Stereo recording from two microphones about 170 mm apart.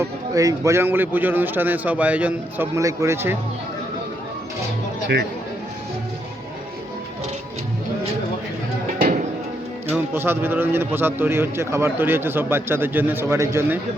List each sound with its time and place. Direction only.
0.0 s a man's voice: 20° right (ahead or behind)
10.2 s a man's voice: 15° right (ahead or behind)